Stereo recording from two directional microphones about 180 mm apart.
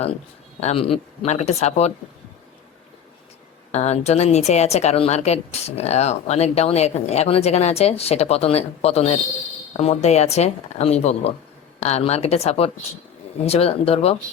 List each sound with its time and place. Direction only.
0.6 s a woman's voice: 35° left (ahead or behind)
3.7 s a woman's voice: 40° left (ahead or behind)